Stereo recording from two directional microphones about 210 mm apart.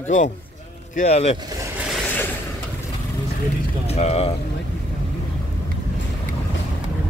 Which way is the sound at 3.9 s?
30° left (ahead or behind).